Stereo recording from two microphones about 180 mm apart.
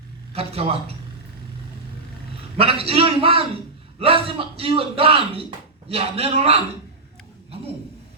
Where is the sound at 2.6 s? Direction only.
30° right (ahead or behind).